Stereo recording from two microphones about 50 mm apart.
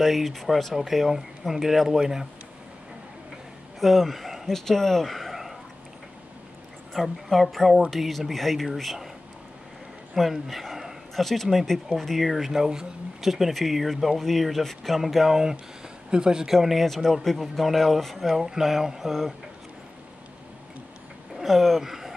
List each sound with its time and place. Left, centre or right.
0.0 s speech: centre
3.8 s speech: centre
6.9 s speech: centre
10.1 s speech: centre
16.5 s speech: centre
21.4 s speech: centre